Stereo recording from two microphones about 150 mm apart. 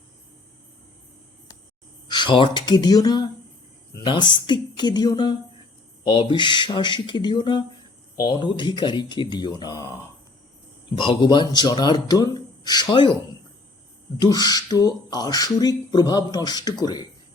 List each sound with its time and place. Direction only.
2.0 s speech: 30° left (ahead or behind)
14.2 s speech: 25° left (ahead or behind)